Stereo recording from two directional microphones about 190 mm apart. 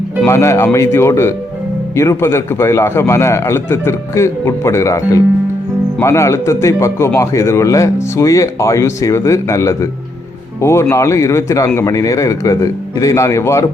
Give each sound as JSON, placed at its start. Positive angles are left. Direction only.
{"t": 0.3, "sound": "a man's voice", "side_deg": 15}